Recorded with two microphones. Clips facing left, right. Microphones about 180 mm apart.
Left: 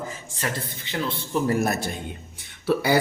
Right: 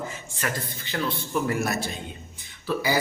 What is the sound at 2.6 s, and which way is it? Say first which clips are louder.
Speech: left 5 dB; 60° left (ahead or behind).